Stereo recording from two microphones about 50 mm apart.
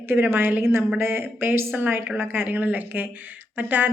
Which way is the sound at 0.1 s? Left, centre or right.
Right.